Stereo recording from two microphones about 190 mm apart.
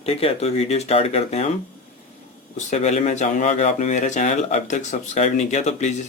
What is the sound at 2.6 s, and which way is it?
Speech, 35° left (ahead or behind).